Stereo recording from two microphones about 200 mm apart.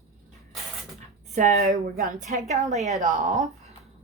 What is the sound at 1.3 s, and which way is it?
A woman's voice, 40° right (ahead or behind).